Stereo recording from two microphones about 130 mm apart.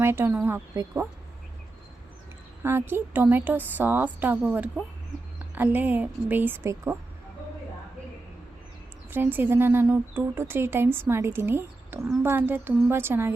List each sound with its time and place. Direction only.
0.0 s speech: 20° right (ahead or behind)
2.6 s speech: 15° right (ahead or behind)
9.0 s speech: 15° right (ahead or behind)